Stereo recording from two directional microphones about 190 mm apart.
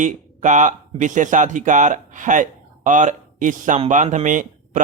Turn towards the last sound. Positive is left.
turn(degrees=-40)  # may be behind; listen again after turning